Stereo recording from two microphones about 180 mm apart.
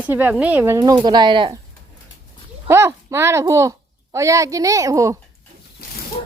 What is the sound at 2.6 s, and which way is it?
A woman's voice, 15° right (ahead or behind).